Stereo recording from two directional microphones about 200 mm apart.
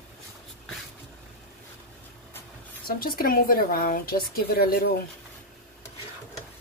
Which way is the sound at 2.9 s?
45° left (ahead or behind).